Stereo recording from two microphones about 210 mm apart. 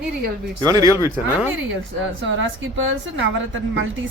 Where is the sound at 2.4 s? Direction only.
65° right (ahead or behind).